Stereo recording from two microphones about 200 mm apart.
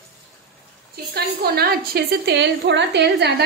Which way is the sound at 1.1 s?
50° right (ahead or behind).